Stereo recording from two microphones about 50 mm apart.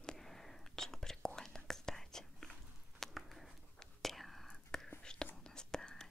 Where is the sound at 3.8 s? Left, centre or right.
Centre.